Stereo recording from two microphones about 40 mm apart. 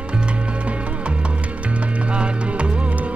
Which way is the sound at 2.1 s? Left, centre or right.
Right.